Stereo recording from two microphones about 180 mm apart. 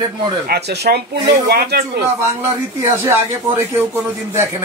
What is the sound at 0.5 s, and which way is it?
Speech, 65° right (ahead or behind).